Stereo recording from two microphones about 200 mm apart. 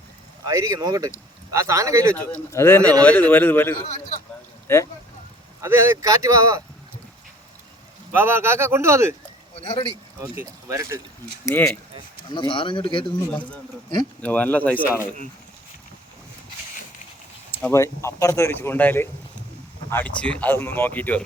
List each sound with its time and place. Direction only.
0.4 s speech: 15° right (ahead or behind)
2.3 s speech: 10° left (ahead or behind)
5.6 s speech: 15° right (ahead or behind)
8.1 s speech: 10° right (ahead or behind)
9.6 s speech: 25° left (ahead or behind)
10.2 s speech: 15° right (ahead or behind)
11.4 s speech: 10° left (ahead or behind)
12.3 s speech: 25° left (ahead or behind)
14.2 s speech: 5° left (ahead or behind)
17.5 s speech: 10° left (ahead or behind)